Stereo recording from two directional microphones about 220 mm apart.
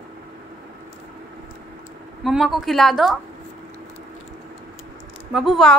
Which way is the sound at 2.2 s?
Centre (ahead or behind).